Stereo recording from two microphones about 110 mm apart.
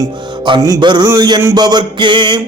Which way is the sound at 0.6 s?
35° right (ahead or behind).